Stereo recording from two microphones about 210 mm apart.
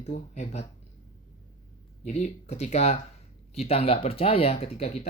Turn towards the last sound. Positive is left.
turn(degrees=30)  # may be behind; listen again after turning